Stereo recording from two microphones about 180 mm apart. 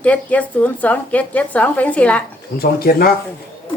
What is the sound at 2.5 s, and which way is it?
Speech, 55° left (ahead or behind).